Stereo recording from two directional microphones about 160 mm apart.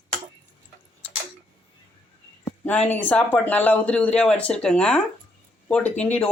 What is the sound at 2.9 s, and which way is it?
Speech, 10° left (ahead or behind).